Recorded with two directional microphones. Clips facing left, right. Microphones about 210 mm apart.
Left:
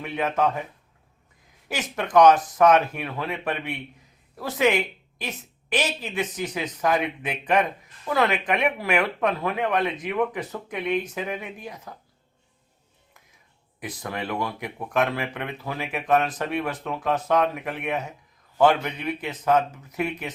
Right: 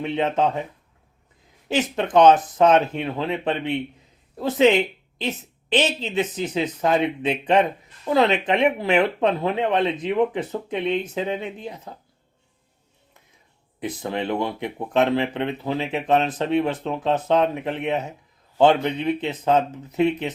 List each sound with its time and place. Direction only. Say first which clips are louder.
0.0 s speech: right 3 dB; 25° right (ahead or behind)
1.6 s speech: right 7 dB; 25° right (ahead or behind)
13.7 s speech: right 6 dB; 25° right (ahead or behind)